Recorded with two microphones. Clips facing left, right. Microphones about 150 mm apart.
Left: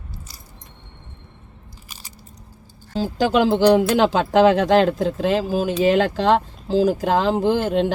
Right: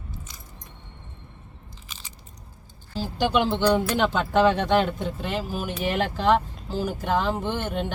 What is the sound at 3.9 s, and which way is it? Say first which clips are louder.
Speech: left 6 dB; 90° left.